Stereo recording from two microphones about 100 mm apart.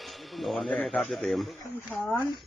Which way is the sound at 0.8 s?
5° left (ahead or behind).